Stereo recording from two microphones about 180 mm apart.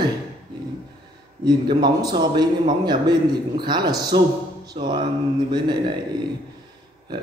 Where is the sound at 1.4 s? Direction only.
25° right (ahead or behind).